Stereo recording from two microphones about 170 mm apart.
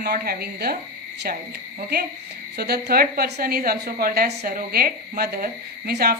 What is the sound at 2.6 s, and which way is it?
A woman's voice, 70° right (ahead or behind).